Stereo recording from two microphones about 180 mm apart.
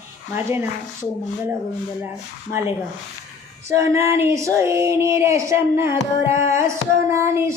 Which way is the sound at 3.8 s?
15° right (ahead or behind).